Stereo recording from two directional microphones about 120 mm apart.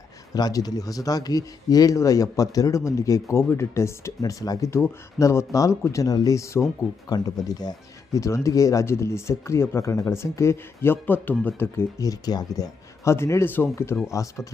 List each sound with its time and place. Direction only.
0.3 s speech: 35° left (ahead or behind)
12.0 s speech: 30° left (ahead or behind)